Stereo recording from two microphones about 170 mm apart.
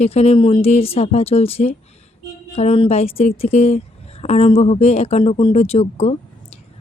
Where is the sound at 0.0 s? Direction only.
35° left (ahead or behind).